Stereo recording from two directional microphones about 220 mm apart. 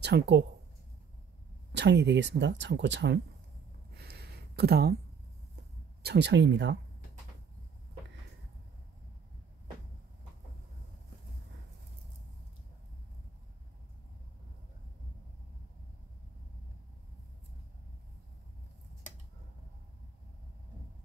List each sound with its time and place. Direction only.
0.0 s speech: 50° right (ahead or behind)
1.7 s speech: 50° right (ahead or behind)
3.9 s a sound: 45° right (ahead or behind)
6.0 s speech: 50° right (ahead or behind)